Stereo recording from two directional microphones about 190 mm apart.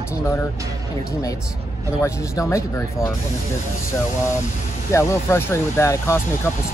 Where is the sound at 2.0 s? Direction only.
15° left (ahead or behind).